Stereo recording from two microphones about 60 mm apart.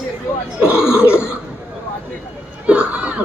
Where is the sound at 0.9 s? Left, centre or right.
Centre.